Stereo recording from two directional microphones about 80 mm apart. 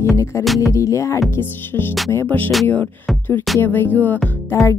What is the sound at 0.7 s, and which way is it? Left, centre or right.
Music, left.